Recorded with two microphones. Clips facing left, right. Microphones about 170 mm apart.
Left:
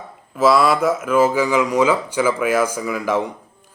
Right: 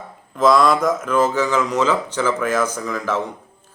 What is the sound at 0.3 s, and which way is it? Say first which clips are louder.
Speech: even; 5° left (ahead or behind).